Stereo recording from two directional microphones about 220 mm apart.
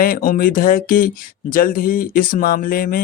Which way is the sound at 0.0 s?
40° left (ahead or behind).